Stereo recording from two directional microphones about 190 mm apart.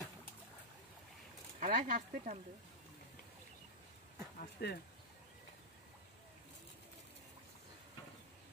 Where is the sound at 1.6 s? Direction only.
45° right (ahead or behind).